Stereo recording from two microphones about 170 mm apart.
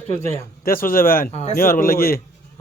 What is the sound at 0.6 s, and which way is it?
A man's voice, 55° left (ahead or behind).